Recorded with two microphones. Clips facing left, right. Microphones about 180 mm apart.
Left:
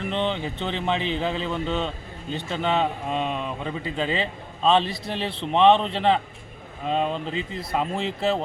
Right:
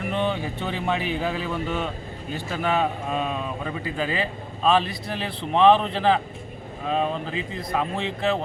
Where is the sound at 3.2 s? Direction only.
5° right (ahead or behind).